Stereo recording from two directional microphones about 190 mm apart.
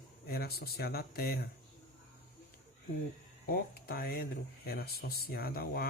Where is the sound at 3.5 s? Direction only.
50° left (ahead or behind).